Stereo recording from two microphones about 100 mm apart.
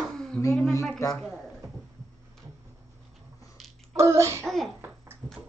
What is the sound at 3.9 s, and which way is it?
Speech, 30° right (ahead or behind).